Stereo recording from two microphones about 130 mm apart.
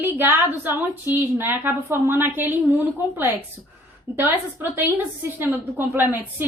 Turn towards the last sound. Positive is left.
turn(degrees=-15)  # may be behind; listen again after turning